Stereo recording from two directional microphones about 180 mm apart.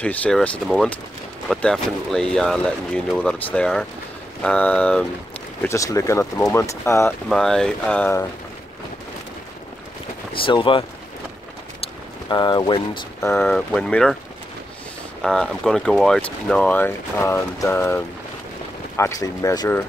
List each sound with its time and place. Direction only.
0.0 s speech: 10° left (ahead or behind)
7.2 s speech: centre (ahead or behind)
10.3 s speech: 30° left (ahead or behind)
12.3 s speech: 25° left (ahead or behind)
13.4 s speech: 5° left (ahead or behind)
15.2 s speech: 5° left (ahead or behind); by 19.8 s 20° left (ahead or behind)